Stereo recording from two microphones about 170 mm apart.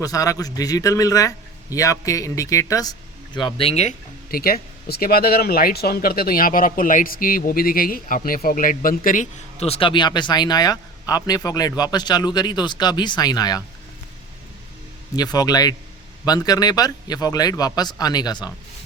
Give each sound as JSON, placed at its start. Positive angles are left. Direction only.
{"t": 0.0, "sound": "a man's voice", "side_deg": 20}
{"t": 3.3, "sound": "speech", "side_deg": 30}
{"t": 4.3, "sound": "speech", "side_deg": 60}
{"t": 9.6, "sound": "a man's voice", "side_deg": 35}
{"t": 15.1, "sound": "a man's voice", "side_deg": 25}